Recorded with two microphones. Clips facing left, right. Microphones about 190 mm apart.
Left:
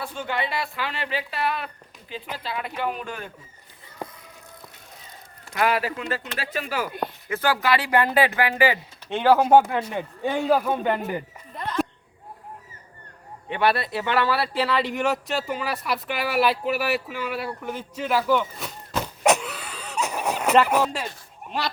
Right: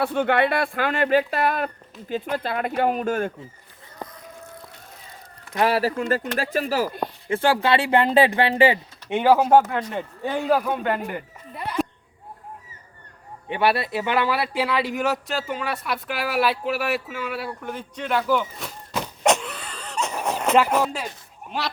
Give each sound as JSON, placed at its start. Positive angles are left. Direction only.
{"t": 0.0, "sound": "speech", "side_deg": -60}
{"t": 5.5, "sound": "speech", "side_deg": -35}
{"t": 9.0, "sound": "speech", "side_deg": -10}
{"t": 9.5, "sound": "speech", "side_deg": 10}
{"t": 11.5, "sound": "speech", "side_deg": -10}
{"t": 13.7, "sound": "speech", "side_deg": -15}